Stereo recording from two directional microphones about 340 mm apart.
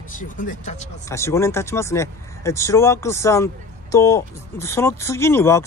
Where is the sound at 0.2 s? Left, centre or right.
Left.